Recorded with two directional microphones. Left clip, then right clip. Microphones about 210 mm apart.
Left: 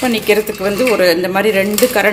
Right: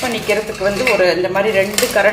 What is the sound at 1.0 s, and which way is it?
A woman's voice, 55° left (ahead or behind).